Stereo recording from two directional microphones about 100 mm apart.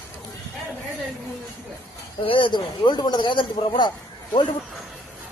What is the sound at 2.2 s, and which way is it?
Speech, 60° left (ahead or behind).